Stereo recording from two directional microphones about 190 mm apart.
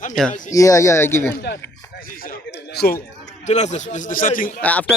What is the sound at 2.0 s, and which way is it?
Speech, 50° left (ahead or behind).